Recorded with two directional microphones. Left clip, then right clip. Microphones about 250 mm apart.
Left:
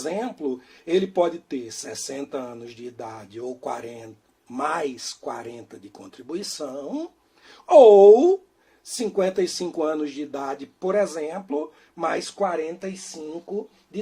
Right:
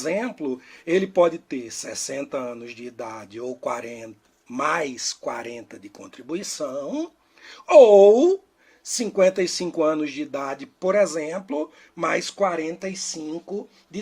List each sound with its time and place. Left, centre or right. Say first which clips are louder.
0.0 s speech: right 2 dB; right